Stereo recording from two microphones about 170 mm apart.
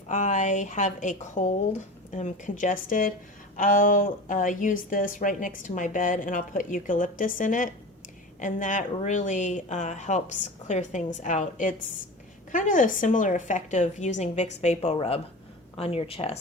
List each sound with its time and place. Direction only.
0.1 s a woman's voice: 45° left (ahead or behind)